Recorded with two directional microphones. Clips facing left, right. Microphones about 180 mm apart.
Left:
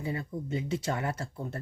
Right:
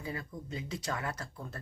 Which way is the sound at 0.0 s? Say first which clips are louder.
Left 6 dB; 25° left (ahead or behind).